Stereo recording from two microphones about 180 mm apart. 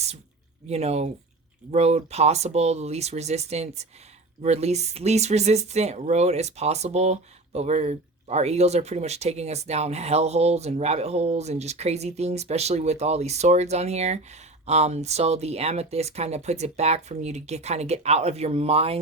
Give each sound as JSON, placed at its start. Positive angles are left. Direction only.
{"t": 0.7, "sound": "speech", "side_deg": -35}